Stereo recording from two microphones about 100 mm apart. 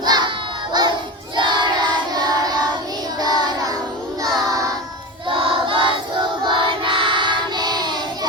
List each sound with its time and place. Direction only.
0.0 s crowd: 45° right (ahead or behind)
1.4 s child singing: 50° right (ahead or behind)
5.3 s child singing: 60° right (ahead or behind); by 8.3 s 45° right (ahead or behind)